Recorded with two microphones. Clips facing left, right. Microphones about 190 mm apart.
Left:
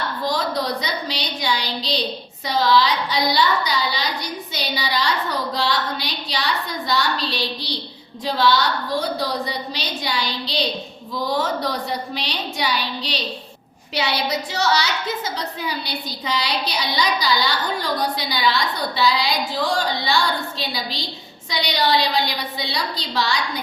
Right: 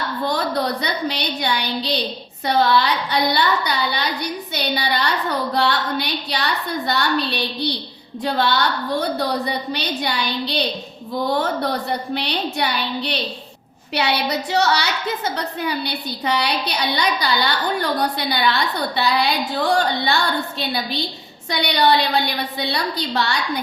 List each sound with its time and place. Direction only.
0.3 s a woman's voice: 60° right (ahead or behind)